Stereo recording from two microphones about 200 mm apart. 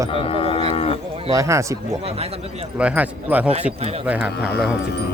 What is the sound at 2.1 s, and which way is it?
Speech, 30° right (ahead or behind).